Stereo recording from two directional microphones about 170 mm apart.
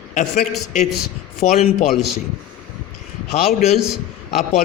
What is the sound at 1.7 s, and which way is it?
Speech, 40° left (ahead or behind).